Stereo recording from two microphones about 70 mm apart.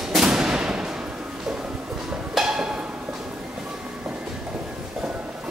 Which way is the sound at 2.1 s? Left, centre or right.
Centre.